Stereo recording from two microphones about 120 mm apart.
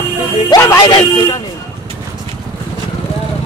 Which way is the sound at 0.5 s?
30° left (ahead or behind).